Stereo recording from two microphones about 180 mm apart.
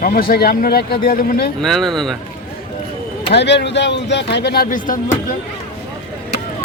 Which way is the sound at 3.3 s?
70° left (ahead or behind).